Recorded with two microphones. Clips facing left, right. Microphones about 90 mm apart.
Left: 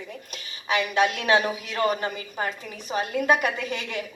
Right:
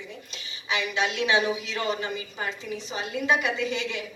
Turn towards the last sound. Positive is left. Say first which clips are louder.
# right 1 dB
turn(degrees=50)  # may be behind; listen again after turning